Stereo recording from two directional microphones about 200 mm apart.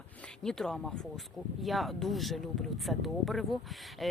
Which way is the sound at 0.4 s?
5° left (ahead or behind).